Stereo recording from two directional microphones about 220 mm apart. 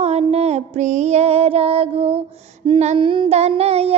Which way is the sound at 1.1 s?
25° right (ahead or behind).